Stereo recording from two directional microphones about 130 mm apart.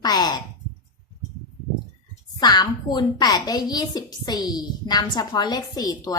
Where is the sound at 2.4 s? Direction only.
30° left (ahead or behind).